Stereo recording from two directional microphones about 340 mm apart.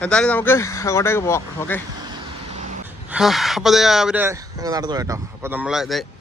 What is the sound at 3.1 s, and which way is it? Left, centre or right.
Speech, centre.